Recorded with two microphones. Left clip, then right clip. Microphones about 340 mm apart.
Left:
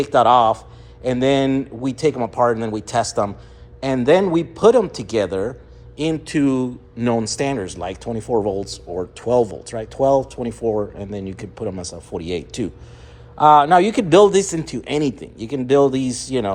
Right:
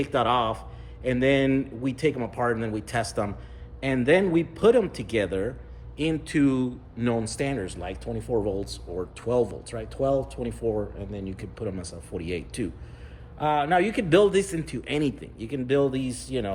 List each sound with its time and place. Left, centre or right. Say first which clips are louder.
0.0 s speech: left 10 dB; centre
13.4 s a man's voice: left 13 dB; left
13.7 s speech: left 8 dB; centre